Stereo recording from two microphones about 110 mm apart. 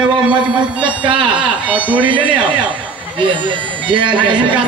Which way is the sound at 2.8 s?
45° right (ahead or behind).